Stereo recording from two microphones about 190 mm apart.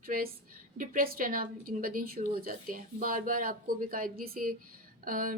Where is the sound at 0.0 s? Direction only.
50° right (ahead or behind).